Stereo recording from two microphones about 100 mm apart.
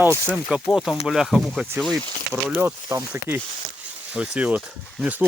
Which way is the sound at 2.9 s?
25° right (ahead or behind).